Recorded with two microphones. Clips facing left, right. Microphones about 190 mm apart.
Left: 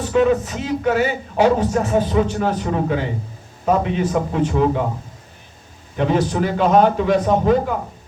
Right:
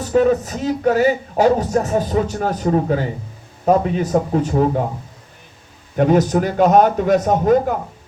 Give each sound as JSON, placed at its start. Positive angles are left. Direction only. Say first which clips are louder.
{"t": 0.0, "sound": "speech", "louder": "right 1 dB", "side_deg": -40}
{"t": 6.0, "sound": "a man's voice", "louder": "right 4 dB", "side_deg": -45}